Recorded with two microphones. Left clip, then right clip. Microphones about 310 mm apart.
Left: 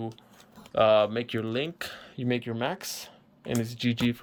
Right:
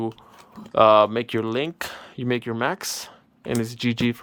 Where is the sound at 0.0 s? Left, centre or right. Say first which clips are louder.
Right 9 dB; centre.